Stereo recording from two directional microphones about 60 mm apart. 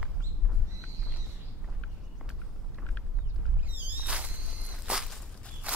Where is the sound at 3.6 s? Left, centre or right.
Right.